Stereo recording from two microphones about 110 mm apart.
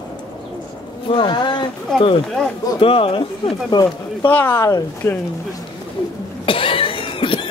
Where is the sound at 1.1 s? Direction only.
45° left (ahead or behind).